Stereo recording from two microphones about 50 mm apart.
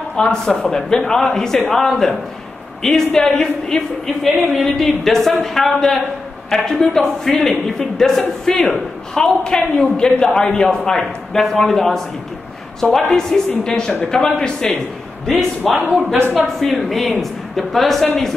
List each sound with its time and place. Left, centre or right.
0.1 s a man's voice: centre
15.7 s speech: right
16.3 s speech: centre